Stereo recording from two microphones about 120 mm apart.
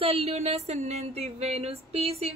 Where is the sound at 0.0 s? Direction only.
55° right (ahead or behind).